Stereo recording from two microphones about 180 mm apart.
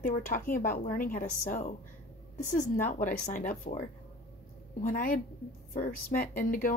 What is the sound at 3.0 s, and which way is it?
A woman's voice, 50° left (ahead or behind).